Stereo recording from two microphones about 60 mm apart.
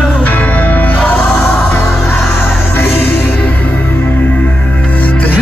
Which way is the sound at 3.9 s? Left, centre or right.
Left.